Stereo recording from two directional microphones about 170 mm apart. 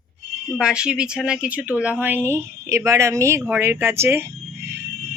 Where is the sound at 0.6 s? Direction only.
5° right (ahead or behind).